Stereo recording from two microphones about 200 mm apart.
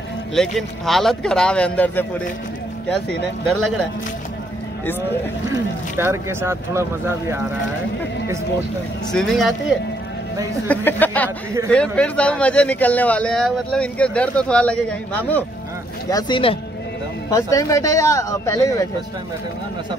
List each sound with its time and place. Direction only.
0.3 s speech: centre (ahead or behind)
5.9 s speech: 10° right (ahead or behind)
9.1 s speech: centre (ahead or behind)
11.2 s speech: 15° right (ahead or behind)
11.7 s speech: 5° left (ahead or behind)
16.1 s speech: 20° left (ahead or behind)